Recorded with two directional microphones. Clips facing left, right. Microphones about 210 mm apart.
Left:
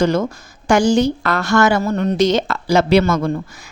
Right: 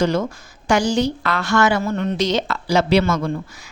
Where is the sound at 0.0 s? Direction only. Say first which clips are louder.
Left 3 dB; 45° left (ahead or behind).